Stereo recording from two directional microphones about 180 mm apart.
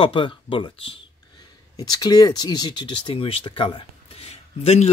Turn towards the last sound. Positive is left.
turn(degrees=35)  # may be behind; listen again after turning